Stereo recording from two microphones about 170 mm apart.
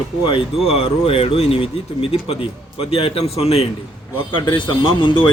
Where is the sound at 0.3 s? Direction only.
35° left (ahead or behind).